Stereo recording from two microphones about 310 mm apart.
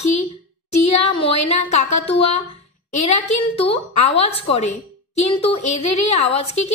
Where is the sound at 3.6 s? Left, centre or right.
Centre.